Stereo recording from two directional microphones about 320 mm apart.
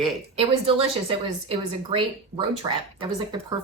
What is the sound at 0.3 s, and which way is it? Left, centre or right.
A woman's voice, centre.